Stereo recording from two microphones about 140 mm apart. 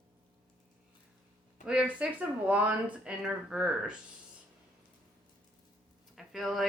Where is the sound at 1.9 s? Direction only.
10° right (ahead or behind).